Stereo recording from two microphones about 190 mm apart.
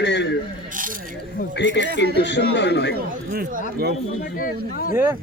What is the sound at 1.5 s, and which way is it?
Speech, 65° left (ahead or behind).